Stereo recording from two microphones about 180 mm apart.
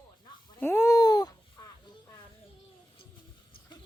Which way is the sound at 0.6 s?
15° left (ahead or behind).